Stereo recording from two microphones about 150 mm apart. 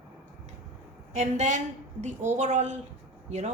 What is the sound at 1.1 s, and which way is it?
Speech, 50° right (ahead or behind).